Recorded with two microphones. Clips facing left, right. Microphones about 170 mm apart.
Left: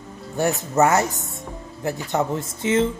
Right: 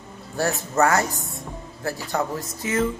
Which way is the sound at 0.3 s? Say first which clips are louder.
Left 2 dB; 20° left (ahead or behind).